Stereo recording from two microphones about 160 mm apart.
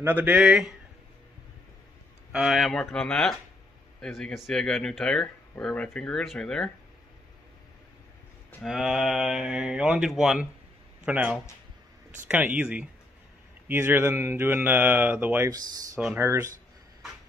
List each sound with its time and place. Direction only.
0.0 s speech: 10° right (ahead or behind)
2.3 s speech: centre (ahead or behind)
8.6 s speech: centre (ahead or behind)